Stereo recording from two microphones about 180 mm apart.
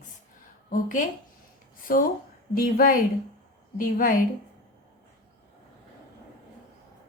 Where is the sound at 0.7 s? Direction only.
45° left (ahead or behind).